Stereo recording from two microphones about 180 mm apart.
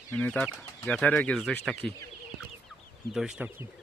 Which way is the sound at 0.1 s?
10° left (ahead or behind).